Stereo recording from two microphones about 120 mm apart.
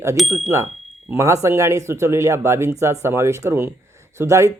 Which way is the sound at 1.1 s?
25° right (ahead or behind).